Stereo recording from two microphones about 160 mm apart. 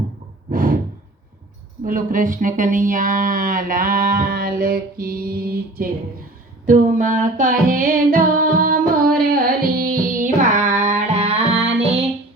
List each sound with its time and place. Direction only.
0.5 s sigh: 60° right (ahead or behind)
1.8 s speech: 55° right (ahead or behind)
6.7 s speech: 55° right (ahead or behind)
9.2 s music: 65° right (ahead or behind); by 12.0 s 40° right (ahead or behind)